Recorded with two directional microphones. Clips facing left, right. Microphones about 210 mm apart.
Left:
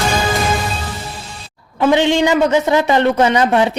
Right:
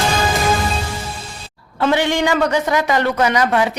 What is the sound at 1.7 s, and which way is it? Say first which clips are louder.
Speech: left 4 dB; 15° left (ahead or behind).